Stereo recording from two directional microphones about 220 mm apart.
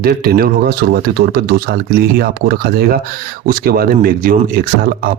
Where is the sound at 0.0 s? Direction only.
45° right (ahead or behind).